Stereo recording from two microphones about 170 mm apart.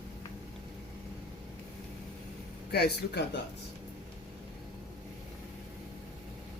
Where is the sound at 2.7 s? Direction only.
80° left.